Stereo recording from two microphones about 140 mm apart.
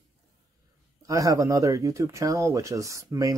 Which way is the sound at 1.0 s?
25° right (ahead or behind).